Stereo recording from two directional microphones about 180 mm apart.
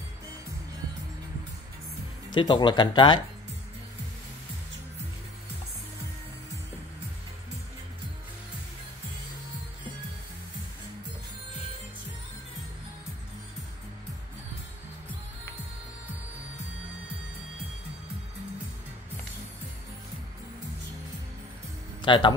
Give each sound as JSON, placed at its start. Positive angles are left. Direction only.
{"t": 2.3, "sound": "speech", "side_deg": 25}
{"t": 22.0, "sound": "speech", "side_deg": 25}